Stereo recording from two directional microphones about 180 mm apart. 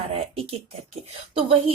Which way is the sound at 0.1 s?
35° right (ahead or behind).